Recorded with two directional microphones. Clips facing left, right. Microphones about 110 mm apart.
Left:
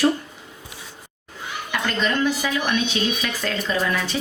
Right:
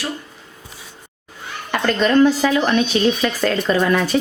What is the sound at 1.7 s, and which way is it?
Speech, 50° right (ahead or behind).